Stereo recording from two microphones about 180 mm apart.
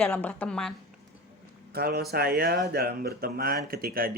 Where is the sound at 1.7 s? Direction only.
60° right (ahead or behind).